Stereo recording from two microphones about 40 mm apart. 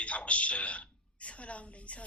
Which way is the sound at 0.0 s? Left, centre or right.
Left.